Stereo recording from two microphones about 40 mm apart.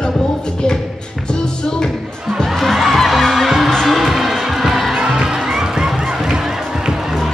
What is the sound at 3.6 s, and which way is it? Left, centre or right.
Music, centre.